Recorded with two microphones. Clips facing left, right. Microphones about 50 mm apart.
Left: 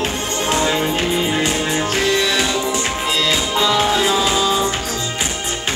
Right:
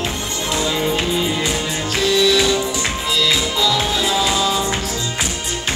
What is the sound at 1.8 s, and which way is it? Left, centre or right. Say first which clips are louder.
Music: right 4 dB; left.